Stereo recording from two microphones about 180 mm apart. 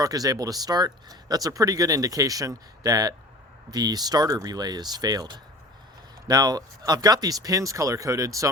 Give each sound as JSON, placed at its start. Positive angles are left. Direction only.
{"t": 0.0, "sound": "speech", "side_deg": -20}